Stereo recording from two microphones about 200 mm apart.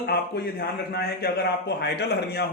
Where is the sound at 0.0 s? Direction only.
55° left (ahead or behind).